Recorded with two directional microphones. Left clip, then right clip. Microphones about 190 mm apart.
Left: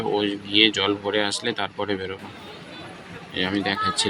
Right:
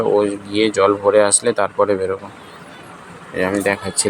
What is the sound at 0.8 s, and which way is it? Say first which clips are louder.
Speech: right 10 dB; 10° left (ahead or behind).